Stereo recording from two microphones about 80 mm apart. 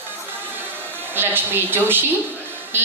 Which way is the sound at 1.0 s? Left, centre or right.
Right.